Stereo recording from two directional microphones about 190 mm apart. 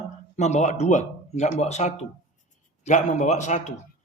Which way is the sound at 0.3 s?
35° left (ahead or behind).